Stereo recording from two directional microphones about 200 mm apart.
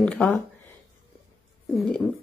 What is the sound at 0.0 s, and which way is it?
Speech, 5° left (ahead or behind).